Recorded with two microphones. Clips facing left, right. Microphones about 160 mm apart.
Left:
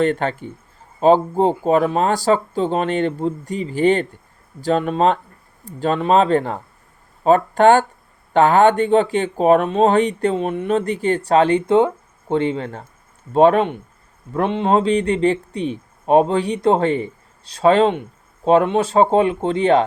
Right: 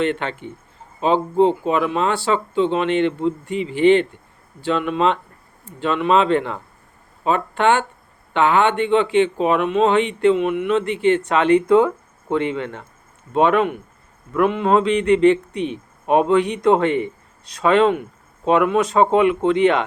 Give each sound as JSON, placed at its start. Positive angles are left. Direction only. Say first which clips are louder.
{"t": 0.0, "sound": "speech", "louder": "left 3 dB", "side_deg": 40}